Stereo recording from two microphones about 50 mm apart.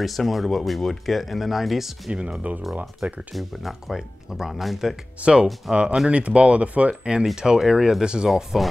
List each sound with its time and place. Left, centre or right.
0.0 s speech: centre
2.1 s speech: centre
3.3 s speech: centre
5.2 s speech: centre
7.3 s speech: centre
8.3 s speech: centre